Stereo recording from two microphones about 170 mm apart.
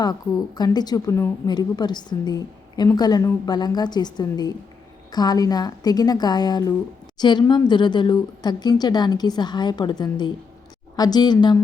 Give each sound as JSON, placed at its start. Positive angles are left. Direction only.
{"t": 0.0, "sound": "a woman's voice", "side_deg": 25}